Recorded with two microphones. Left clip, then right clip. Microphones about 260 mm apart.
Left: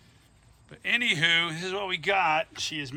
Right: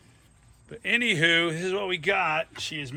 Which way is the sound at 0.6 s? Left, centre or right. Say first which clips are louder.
Right 1 dB; centre.